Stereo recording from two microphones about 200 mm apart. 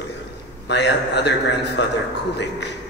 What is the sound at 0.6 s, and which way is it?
A man's voice, 55° left (ahead or behind).